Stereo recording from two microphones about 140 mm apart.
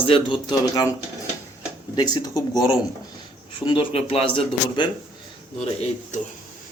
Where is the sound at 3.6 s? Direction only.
35° left (ahead or behind).